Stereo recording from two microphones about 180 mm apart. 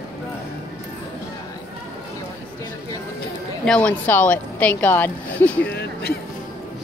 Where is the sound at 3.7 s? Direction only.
5° left (ahead or behind).